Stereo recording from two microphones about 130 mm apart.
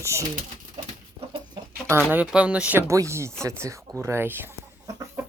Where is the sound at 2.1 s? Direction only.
10° right (ahead or behind).